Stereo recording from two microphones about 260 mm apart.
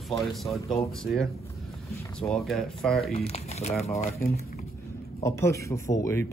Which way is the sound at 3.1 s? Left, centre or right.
Left.